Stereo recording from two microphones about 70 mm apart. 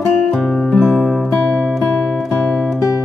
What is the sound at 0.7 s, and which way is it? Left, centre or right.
Music, left.